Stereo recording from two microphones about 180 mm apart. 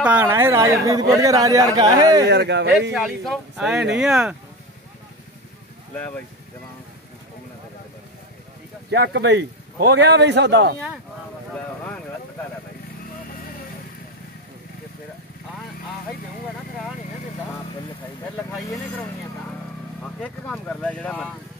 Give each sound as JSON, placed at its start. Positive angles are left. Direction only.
{"t": 0.0, "sound": "a woman's voice", "side_deg": -10}
{"t": 2.2, "sound": "a man's voice", "side_deg": -70}
{"t": 2.9, "sound": "speech", "side_deg": 0}
{"t": 5.9, "sound": "speech", "side_deg": 10}
{"t": 8.9, "sound": "a man's voice", "side_deg": -70}
{"t": 18.5, "sound": "speech", "side_deg": 0}